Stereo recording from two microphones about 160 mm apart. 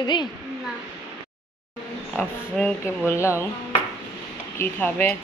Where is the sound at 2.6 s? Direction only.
15° left (ahead or behind).